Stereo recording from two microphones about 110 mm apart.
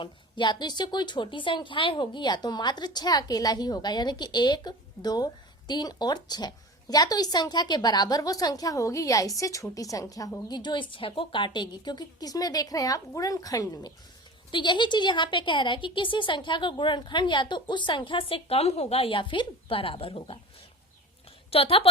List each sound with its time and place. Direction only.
0.0 s a woman's voice: 45° left (ahead or behind)
10.5 s a woman's voice: 45° left (ahead or behind)
14.5 s speech: 45° left (ahead or behind)
21.5 s a woman's voice: 60° left (ahead or behind)